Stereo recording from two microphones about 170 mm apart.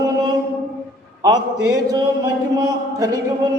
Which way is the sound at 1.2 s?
20° right (ahead or behind).